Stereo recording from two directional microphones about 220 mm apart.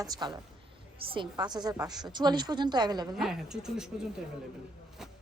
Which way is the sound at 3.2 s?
Centre (ahead or behind).